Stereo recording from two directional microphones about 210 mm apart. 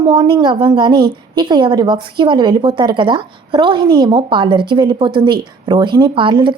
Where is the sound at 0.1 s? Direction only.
20° right (ahead or behind).